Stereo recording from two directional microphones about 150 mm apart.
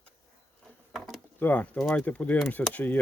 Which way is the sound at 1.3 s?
10° left (ahead or behind).